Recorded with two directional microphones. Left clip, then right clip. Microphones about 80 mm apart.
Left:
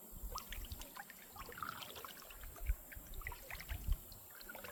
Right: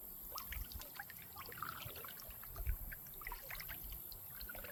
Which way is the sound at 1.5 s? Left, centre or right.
Right.